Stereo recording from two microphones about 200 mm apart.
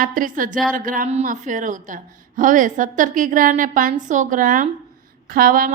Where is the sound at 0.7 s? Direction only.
45° right (ahead or behind).